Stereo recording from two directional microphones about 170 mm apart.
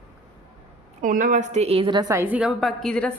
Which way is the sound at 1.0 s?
50° right (ahead or behind).